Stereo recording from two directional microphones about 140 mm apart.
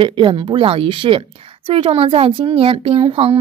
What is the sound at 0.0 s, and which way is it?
A woman's voice, 35° right (ahead or behind).